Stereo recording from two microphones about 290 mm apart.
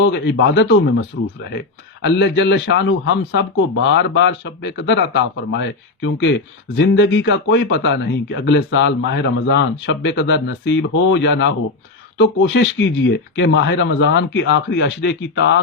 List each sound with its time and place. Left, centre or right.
0.0 s speech: left